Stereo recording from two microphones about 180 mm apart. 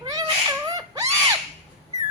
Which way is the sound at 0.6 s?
20° right (ahead or behind).